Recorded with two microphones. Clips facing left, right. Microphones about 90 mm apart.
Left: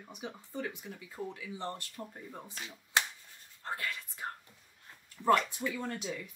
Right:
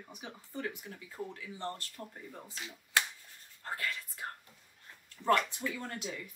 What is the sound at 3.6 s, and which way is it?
Whispering, 20° left (ahead or behind).